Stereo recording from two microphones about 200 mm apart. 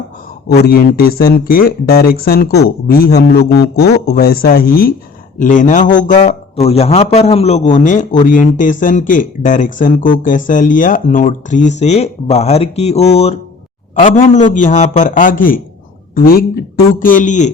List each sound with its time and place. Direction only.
0.4 s speech: 50° left (ahead or behind)